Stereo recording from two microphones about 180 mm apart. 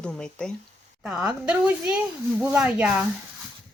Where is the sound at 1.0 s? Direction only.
5° right (ahead or behind).